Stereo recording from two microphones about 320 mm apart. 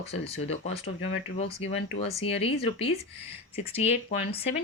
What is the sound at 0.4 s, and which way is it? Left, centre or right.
Speech, centre.